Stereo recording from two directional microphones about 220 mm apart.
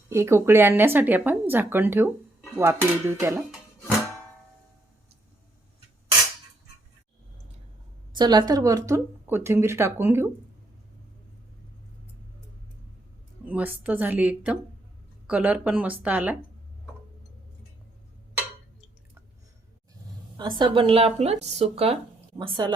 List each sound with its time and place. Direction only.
0.1 s speech: 10° right (ahead or behind)
3.5 s music: centre (ahead or behind)
8.1 s speech: 20° right (ahead or behind)
13.4 s speech: 5° right (ahead or behind)
20.3 s a woman's voice: 20° right (ahead or behind)